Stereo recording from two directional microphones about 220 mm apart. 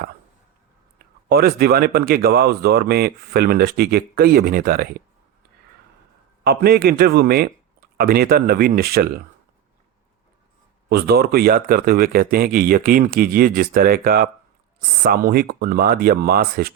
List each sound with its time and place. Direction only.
0.9 s speech: 45° right (ahead or behind)
6.4 s speech: 45° right (ahead or behind)
10.8 s speech: 45° right (ahead or behind)